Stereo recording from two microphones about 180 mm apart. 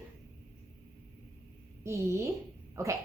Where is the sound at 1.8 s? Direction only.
15° right (ahead or behind).